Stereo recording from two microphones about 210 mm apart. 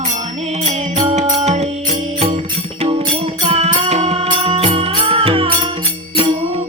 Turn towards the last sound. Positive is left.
turn(degrees=-25)  # may be behind; listen again after turning